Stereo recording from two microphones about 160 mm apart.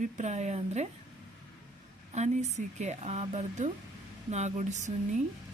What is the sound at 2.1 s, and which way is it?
Speech, 45° right (ahead or behind).